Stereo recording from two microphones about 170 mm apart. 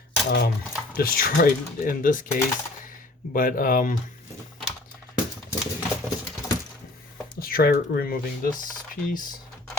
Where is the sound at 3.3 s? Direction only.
55° left (ahead or behind).